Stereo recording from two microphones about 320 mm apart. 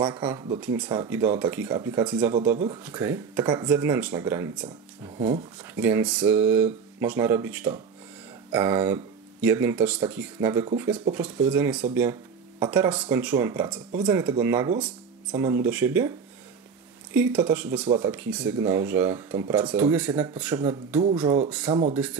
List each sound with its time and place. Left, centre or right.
0.0 s speech: centre
2.5 s speech: right
2.8 s speech: centre
17.1 s speech: centre
17.8 s speech: centre
18.1 s speech: centre
21.7 s speech: centre